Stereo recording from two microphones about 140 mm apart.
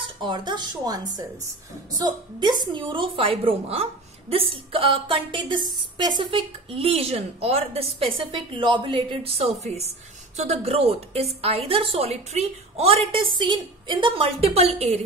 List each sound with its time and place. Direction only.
0.0 s a woman's voice: 35° right (ahead or behind); by 15.0 s 50° right (ahead or behind)